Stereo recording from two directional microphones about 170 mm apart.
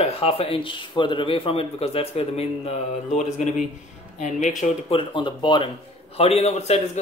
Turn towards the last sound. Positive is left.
turn(degrees=40)  # may be behind; listen again after turning